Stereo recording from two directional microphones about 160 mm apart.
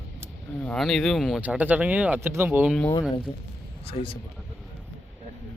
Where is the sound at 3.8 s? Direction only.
35° left (ahead or behind).